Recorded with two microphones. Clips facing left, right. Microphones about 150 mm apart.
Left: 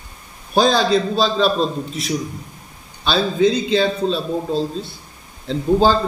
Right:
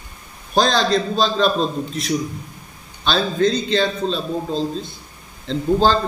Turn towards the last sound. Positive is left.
turn(degrees=10)  # may be behind; listen again after turning